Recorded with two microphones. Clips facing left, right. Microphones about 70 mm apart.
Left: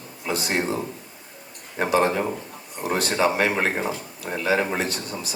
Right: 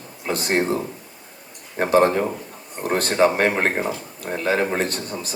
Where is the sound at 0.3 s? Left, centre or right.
Right.